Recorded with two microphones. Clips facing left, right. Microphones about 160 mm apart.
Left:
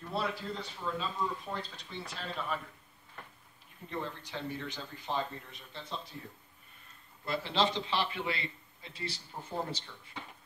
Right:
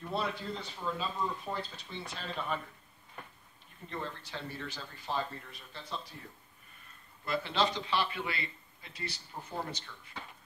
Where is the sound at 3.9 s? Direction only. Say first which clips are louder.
Left 2 dB; 15° left (ahead or behind).